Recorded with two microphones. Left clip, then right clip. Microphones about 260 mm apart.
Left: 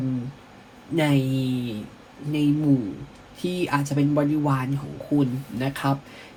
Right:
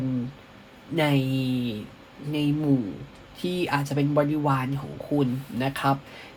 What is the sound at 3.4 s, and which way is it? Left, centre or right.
Speech, right.